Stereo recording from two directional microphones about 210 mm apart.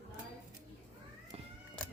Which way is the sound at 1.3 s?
30° right (ahead or behind).